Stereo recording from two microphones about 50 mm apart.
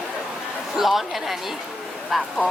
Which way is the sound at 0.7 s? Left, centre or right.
Centre.